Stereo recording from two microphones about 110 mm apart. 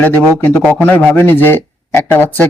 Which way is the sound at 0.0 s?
15° left (ahead or behind).